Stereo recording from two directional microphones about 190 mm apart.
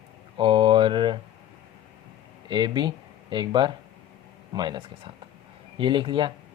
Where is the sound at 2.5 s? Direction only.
25° right (ahead or behind).